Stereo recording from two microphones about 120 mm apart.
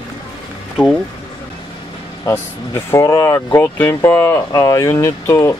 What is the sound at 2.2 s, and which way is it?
Speech, 25° left (ahead or behind).